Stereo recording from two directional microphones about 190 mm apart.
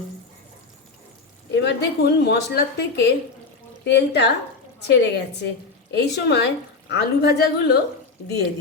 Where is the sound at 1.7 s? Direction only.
60° left (ahead or behind).